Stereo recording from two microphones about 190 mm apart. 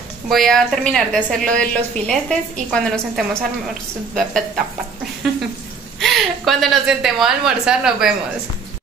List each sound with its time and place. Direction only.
0.3 s a woman's voice: centre (ahead or behind)
5.9 s a woman's voice: centre (ahead or behind)